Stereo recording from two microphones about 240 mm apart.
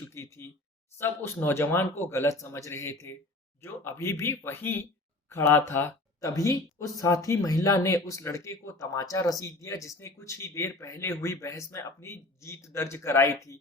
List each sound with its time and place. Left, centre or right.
0.0 s speech: centre